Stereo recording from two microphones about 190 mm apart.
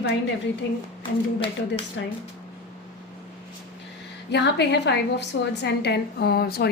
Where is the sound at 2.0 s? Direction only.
75° left (ahead or behind).